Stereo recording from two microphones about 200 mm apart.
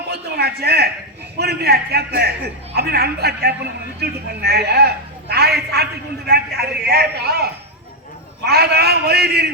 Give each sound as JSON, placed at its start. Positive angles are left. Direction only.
{"t": 0.1, "sound": "a sound", "side_deg": -55}
{"t": 1.4, "sound": "a man's voice", "side_deg": -55}
{"t": 8.4, "sound": "a man's voice", "side_deg": -55}